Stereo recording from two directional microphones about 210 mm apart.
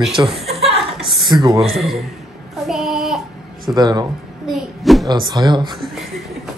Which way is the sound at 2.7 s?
Centre (ahead or behind).